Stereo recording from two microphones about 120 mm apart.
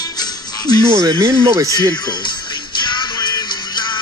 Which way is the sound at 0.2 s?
35° left (ahead or behind).